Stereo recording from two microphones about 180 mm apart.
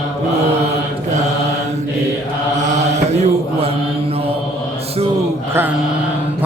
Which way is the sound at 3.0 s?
35° right (ahead or behind).